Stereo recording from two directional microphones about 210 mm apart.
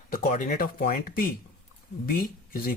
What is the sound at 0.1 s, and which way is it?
Speech, 40° left (ahead or behind).